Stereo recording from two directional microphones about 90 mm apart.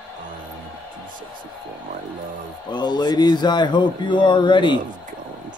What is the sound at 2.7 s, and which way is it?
Speech, 55° left (ahead or behind).